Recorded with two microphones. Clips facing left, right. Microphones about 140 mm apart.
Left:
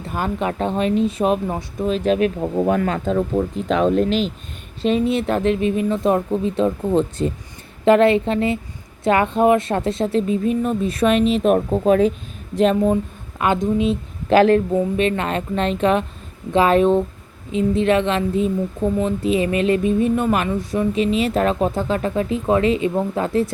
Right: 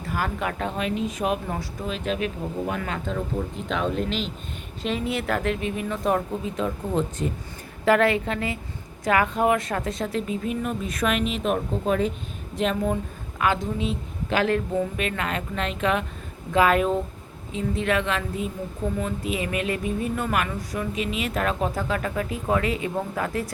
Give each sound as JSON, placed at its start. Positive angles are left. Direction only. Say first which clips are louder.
{"t": 0.0, "sound": "speech", "louder": "left 5 dB", "side_deg": 25}
{"t": 1.9, "sound": "a woman's voice", "louder": "left 10 dB", "side_deg": 45}
{"t": 4.8, "sound": "speech", "louder": "left 9 dB", "side_deg": 25}
{"t": 11.4, "sound": "speech", "louder": "left 8 dB", "side_deg": 50}
{"t": 13.4, "sound": "speech", "louder": "left 6 dB", "side_deg": 20}
{"t": 14.3, "sound": "a woman's voice", "louder": "left 10 dB", "side_deg": 35}